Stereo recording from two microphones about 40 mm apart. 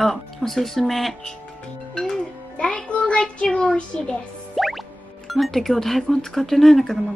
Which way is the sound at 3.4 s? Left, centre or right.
Left.